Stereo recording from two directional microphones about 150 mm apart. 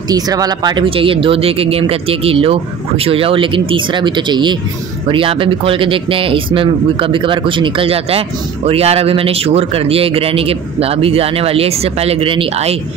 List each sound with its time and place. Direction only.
0.1 s speech: 25° right (ahead or behind)